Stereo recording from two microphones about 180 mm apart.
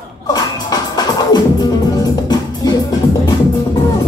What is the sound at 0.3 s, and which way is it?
Music, 20° left (ahead or behind).